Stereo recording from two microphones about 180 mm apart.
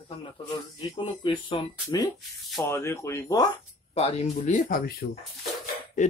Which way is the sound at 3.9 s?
35° left (ahead or behind).